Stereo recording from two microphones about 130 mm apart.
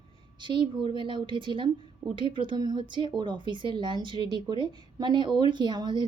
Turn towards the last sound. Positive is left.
turn(degrees=-35)  # may be behind; listen again after turning